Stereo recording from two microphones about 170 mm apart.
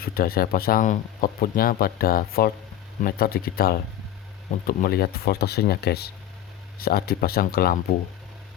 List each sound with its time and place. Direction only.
0.0 s speech: 60° left (ahead or behind)